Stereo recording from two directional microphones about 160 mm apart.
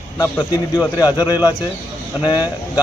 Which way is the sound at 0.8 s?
10° right (ahead or behind).